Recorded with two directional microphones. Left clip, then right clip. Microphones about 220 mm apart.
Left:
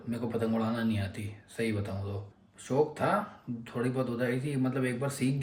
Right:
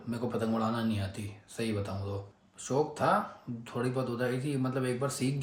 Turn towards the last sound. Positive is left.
turn(degrees=-15)  # may be behind; listen again after turning